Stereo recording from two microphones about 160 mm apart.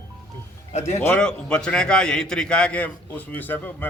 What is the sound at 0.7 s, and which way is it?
Speech, 45° left (ahead or behind).